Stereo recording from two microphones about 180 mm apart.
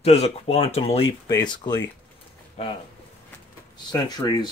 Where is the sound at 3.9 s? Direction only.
20° left (ahead or behind).